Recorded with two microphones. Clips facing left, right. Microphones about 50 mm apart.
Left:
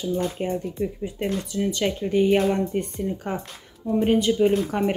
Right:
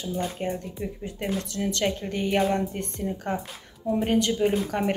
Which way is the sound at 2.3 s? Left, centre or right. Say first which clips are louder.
Left 3 dB; centre.